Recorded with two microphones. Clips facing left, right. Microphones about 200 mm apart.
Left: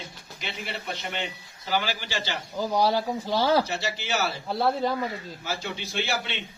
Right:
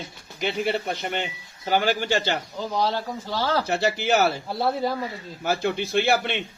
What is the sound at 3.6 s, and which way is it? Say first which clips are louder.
Speech: right 8 dB; 60° right (ahead or behind).